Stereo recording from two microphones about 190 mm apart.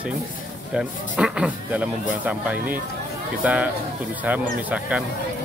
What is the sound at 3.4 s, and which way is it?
Speech, 10° right (ahead or behind).